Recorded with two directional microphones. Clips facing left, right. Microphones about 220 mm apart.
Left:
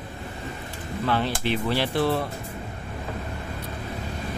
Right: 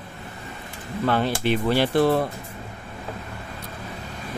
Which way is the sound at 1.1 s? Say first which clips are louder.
Right 3 dB; 50° right (ahead or behind).